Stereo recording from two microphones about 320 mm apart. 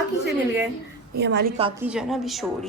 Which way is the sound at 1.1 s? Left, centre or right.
Right.